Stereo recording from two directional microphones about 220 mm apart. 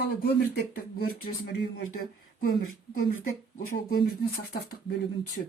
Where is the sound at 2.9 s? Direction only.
40° left (ahead or behind).